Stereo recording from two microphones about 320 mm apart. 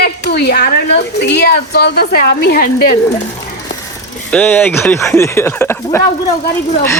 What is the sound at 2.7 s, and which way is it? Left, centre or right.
Speech, left.